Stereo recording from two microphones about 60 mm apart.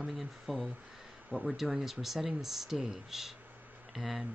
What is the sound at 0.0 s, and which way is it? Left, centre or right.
Speech, centre.